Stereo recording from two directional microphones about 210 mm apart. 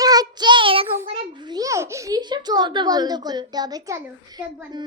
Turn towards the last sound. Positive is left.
turn(degrees=-20)  # may be behind; listen again after turning